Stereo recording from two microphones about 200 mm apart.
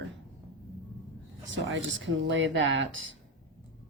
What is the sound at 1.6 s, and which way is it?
Speech, 65° right (ahead or behind).